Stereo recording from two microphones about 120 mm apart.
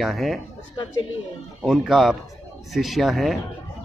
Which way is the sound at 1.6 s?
Centre (ahead or behind).